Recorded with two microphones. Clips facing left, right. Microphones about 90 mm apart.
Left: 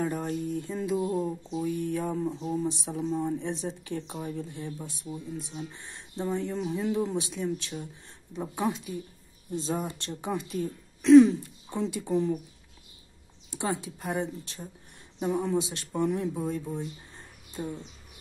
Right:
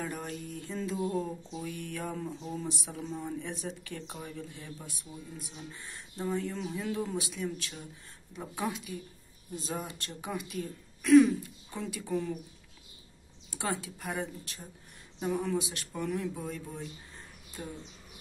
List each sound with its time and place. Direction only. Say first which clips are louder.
0.0 s a sound: left 7 dB; 30° left (ahead or behind)
0.6 s speech: left 1 dB; 20° left (ahead or behind)
13.5 s a woman's voice: left 3 dB; 20° left (ahead or behind)